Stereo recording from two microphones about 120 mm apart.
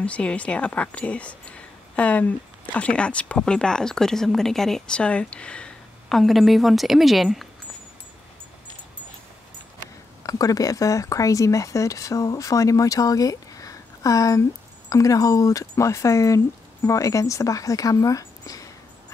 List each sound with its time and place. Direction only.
0.0 s a woman's voice: 10° left (ahead or behind)
10.2 s speech: 30° left (ahead or behind)